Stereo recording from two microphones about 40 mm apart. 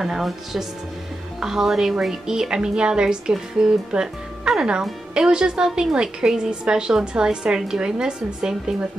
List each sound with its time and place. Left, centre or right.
0.0 s a woman's voice: centre